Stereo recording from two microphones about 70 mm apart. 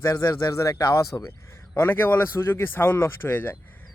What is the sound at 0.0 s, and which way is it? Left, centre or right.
Speech, left.